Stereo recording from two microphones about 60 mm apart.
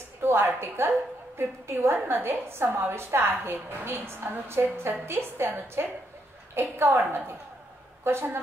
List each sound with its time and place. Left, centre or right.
0.2 s a woman's voice: right